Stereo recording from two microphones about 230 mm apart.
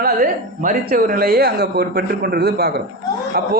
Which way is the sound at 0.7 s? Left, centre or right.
Right.